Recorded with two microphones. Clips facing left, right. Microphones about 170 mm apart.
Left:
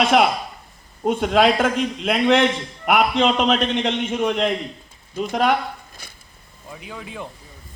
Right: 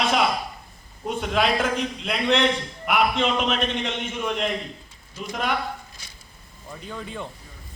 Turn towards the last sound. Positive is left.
turn(degrees=5)  # may be behind; listen again after turning